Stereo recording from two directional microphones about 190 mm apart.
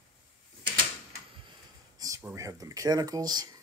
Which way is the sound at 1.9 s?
15° right (ahead or behind).